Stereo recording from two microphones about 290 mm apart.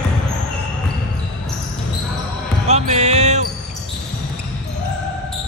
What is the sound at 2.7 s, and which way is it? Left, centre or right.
Basketball bounce, right.